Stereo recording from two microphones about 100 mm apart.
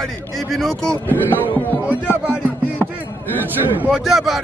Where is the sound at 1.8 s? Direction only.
15° right (ahead or behind).